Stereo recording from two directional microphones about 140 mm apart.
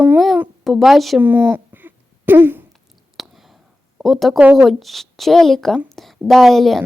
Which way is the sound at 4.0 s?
Centre (ahead or behind).